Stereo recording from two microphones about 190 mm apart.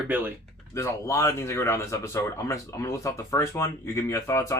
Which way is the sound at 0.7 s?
15° left (ahead or behind).